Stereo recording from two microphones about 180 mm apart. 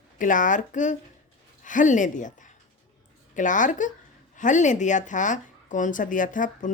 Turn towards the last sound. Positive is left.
turn(degrees=45)  # may be behind; listen again after turning